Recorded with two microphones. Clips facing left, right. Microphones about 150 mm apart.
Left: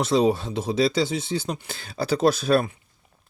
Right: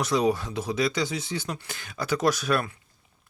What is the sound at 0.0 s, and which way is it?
Speech, 25° left (ahead or behind).